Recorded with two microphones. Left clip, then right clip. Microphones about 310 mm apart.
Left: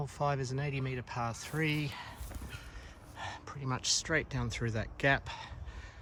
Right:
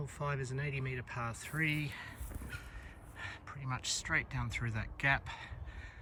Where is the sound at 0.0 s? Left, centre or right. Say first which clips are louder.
Left 6 dB; centre.